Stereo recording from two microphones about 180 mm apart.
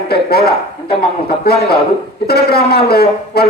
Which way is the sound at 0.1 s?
60° left (ahead or behind).